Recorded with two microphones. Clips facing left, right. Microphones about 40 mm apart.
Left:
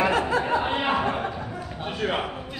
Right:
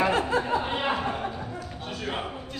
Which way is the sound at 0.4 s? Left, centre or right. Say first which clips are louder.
Left 3 dB; left.